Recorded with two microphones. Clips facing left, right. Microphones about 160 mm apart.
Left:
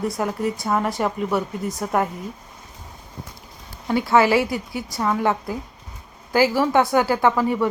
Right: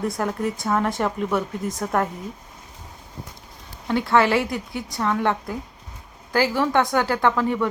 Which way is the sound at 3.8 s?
5° left (ahead or behind).